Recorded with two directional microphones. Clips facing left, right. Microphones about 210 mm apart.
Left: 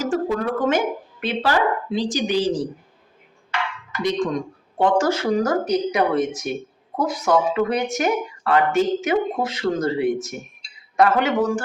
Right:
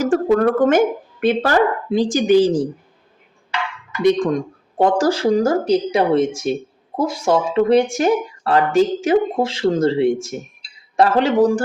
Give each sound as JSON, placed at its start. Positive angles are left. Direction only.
{"t": 0.0, "sound": "speech", "side_deg": -55}
{"t": 4.0, "sound": "speech", "side_deg": -55}
{"t": 4.8, "sound": "speech", "side_deg": -35}